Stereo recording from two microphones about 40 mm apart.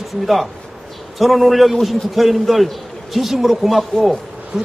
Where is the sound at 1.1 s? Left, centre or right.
Centre.